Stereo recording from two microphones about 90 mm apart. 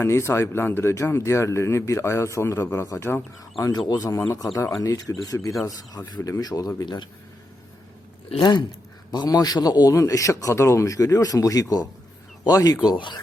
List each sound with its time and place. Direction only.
0.0 s speech: 30° left (ahead or behind)
3.6 s speech: 50° left (ahead or behind)
6.7 s speech: 50° left (ahead or behind)
8.3 s speech: 60° left (ahead or behind)
9.1 s speech: 45° left (ahead or behind)